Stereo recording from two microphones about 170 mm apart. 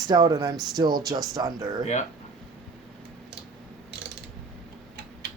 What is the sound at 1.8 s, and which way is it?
Speech, 45° left (ahead or behind).